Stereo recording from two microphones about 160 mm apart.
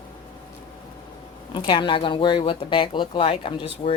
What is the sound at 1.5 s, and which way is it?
Speech, 30° left (ahead or behind).